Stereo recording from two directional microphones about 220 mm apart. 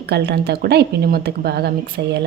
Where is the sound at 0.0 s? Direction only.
50° right (ahead or behind).